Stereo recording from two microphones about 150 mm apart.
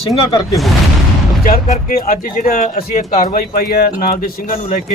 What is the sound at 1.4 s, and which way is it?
Speech, 70° left (ahead or behind).